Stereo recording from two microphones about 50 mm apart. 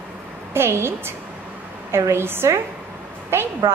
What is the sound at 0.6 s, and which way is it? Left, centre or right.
A woman's voice, right.